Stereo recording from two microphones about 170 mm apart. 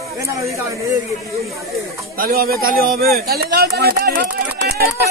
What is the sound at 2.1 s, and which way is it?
Speech, 60° right (ahead or behind).